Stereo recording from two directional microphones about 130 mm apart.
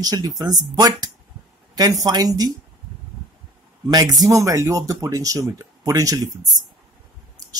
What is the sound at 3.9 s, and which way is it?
Speech, 30° right (ahead or behind).